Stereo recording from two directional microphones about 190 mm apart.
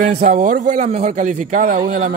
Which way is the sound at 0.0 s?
40° right (ahead or behind).